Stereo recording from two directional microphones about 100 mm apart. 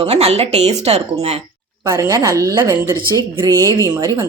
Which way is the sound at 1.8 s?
30° right (ahead or behind).